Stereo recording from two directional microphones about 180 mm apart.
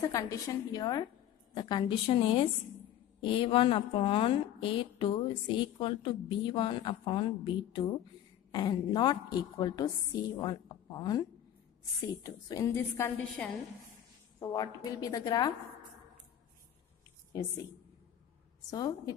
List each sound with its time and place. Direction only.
0.0 s a woman's voice: 20° left (ahead or behind)
18.7 s a woman's voice: 20° left (ahead or behind)